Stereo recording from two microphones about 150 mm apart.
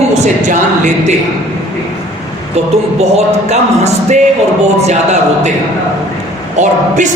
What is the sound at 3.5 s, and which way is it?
Speech, 45° right (ahead or behind).